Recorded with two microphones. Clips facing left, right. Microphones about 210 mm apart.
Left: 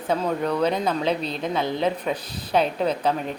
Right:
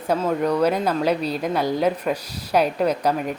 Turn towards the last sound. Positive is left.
turn(degrees=-10)  # may be behind; listen again after turning